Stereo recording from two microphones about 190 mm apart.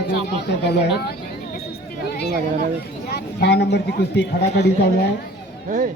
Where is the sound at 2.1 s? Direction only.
55° left (ahead or behind).